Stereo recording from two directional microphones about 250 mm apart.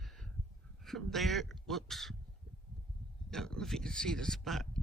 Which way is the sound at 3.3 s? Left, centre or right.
Centre.